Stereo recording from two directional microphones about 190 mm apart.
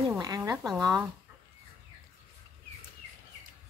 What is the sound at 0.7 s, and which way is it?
Speech, 15° right (ahead or behind).